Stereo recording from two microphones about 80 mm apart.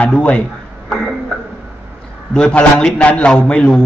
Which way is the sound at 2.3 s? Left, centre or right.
Centre.